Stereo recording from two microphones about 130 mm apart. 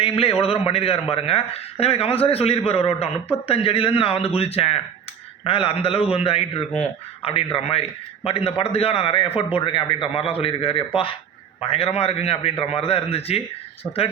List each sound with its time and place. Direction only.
0.0 s a man's voice: 50° left (ahead or behind)